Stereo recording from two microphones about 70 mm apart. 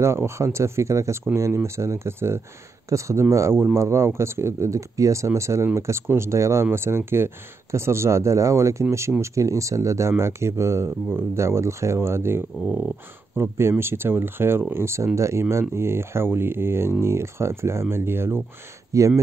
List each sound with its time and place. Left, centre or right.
0.0 s speech: right
18.9 s speech: right